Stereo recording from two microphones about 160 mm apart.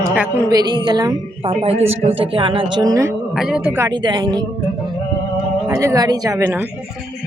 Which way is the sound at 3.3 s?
Centre (ahead or behind).